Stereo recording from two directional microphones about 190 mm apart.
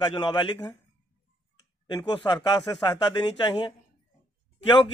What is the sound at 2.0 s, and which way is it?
Speech, 25° left (ahead or behind).